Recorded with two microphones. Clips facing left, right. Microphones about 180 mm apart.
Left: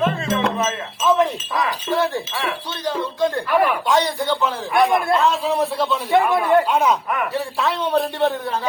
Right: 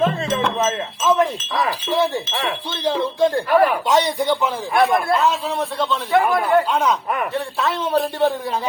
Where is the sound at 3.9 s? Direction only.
20° right (ahead or behind).